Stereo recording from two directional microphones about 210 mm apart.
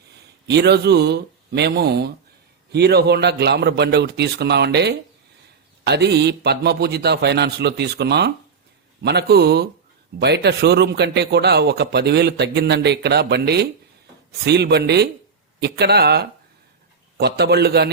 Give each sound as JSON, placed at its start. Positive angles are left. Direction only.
{"t": 0.4, "sound": "a man's voice", "side_deg": -55}